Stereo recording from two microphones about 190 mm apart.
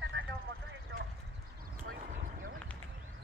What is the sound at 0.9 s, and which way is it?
Clip-clop, 70° right (ahead or behind).